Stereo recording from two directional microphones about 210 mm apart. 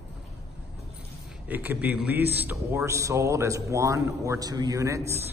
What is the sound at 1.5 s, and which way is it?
A man's voice, 10° right (ahead or behind).